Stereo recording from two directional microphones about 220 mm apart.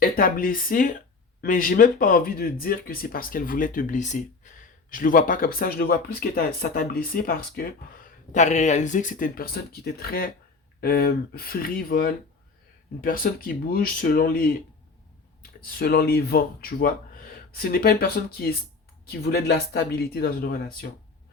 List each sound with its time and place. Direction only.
0.0 s speech: 40° left (ahead or behind)